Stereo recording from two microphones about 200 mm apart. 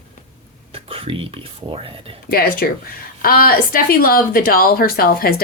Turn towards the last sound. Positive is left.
turn(degrees=50)  # may be behind; listen again after turning